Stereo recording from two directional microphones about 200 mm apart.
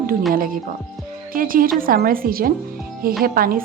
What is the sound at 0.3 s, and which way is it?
Speech, 45° right (ahead or behind).